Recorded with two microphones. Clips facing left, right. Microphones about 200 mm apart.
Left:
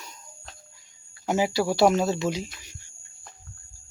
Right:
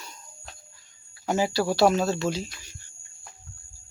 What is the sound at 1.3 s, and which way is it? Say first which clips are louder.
Speech: left 1 dB; 15° left (ahead or behind).